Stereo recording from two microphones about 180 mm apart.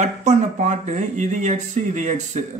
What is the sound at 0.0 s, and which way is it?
A man's voice, 40° right (ahead or behind).